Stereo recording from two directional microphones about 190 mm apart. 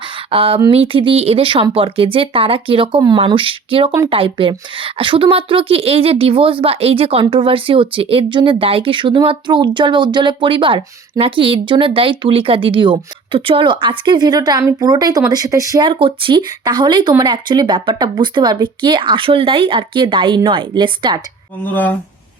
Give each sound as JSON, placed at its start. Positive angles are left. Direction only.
{"t": 0.3, "sound": "a woman's voice", "side_deg": -30}
{"t": 21.6, "sound": "speech", "side_deg": 10}